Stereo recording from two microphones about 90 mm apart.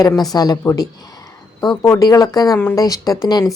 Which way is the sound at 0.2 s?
45° left (ahead or behind).